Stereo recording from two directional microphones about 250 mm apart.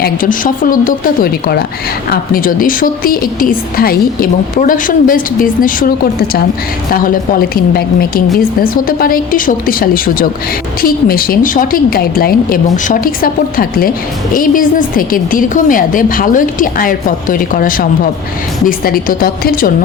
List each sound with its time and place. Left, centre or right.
0.0 s a woman's voice: left
6.9 s a woman's voice: left